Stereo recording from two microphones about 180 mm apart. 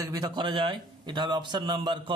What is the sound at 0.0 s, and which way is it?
A man's voice, 20° right (ahead or behind).